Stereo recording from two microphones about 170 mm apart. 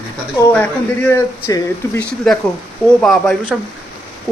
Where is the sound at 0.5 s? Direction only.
10° left (ahead or behind).